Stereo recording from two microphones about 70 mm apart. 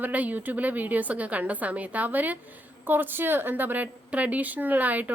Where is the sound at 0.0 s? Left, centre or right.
Right.